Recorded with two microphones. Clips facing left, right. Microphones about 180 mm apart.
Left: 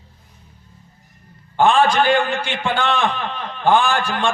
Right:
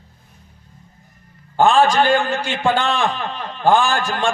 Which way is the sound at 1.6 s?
40° right (ahead or behind).